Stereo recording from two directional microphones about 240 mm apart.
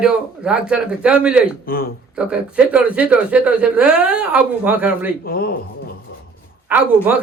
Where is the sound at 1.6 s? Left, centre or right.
Left.